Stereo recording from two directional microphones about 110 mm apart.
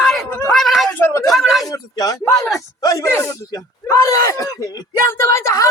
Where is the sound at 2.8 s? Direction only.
30° left (ahead or behind).